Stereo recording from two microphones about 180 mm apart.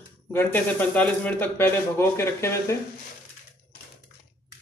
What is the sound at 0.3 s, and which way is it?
Speech, 10° left (ahead or behind).